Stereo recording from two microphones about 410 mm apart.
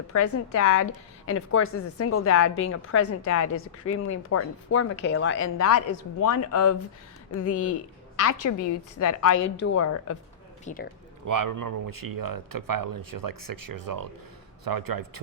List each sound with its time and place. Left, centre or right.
0.1 s a woman's voice: left
8.3 s a woman's voice: left
9.4 s a woman's voice: left
10.7 s speech: centre
11.3 s speech: right